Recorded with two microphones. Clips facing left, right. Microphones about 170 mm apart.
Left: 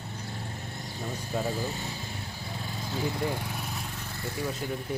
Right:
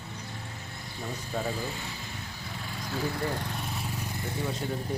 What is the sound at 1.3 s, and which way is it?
Speech, 10° left (ahead or behind).